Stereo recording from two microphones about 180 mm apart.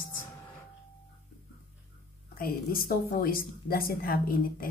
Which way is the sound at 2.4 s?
55° left (ahead or behind).